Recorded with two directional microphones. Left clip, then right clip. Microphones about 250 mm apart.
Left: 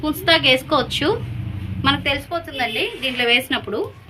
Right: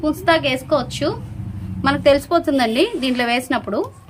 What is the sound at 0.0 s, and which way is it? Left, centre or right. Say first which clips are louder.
A woman's voice: even; centre.